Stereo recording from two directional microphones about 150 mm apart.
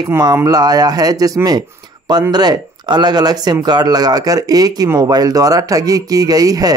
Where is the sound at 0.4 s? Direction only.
25° right (ahead or behind).